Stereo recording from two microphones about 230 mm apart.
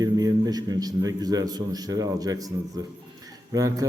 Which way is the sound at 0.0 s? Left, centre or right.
Centre.